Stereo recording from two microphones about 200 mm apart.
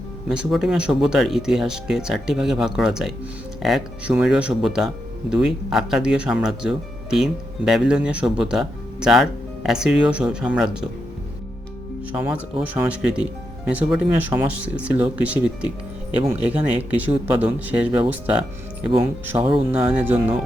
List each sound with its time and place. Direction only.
0.3 s speech: centre (ahead or behind)
12.2 s speech: 10° right (ahead or behind)
19.4 s speech: 25° right (ahead or behind)
19.9 s speech: 10° right (ahead or behind)